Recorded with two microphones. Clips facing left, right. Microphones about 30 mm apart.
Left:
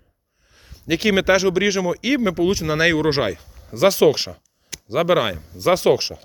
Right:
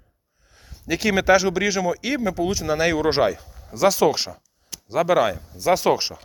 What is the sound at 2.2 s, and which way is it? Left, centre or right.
Speech, left.